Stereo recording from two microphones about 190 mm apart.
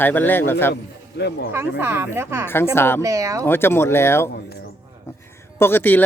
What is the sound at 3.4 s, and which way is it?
Speech, 10° left (ahead or behind).